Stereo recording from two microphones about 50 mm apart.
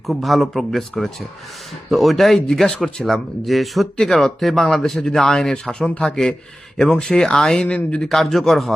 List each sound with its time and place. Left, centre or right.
0.1 s speech: centre
3.9 s speech: centre
5.8 s speech: left
6.7 s speech: centre
8.0 s speech: centre